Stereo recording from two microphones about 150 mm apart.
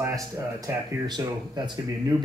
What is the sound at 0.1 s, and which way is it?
Speech, 20° right (ahead or behind).